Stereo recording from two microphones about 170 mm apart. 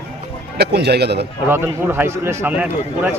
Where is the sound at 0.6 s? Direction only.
75° right (ahead or behind).